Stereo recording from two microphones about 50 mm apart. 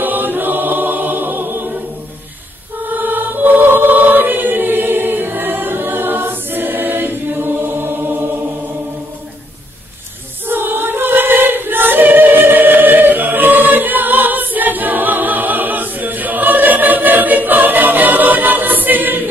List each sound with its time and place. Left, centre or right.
0.0 s choir: right
2.9 s choir: right
10.4 s choir: right